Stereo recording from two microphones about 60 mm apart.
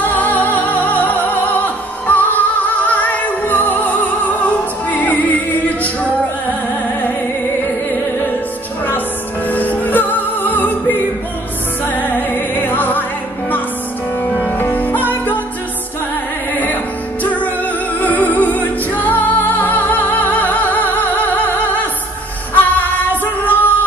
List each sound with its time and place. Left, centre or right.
0.0 s music: left
7.6 s music: left
9.5 s music: left
14.5 s music: left
17.2 s music: left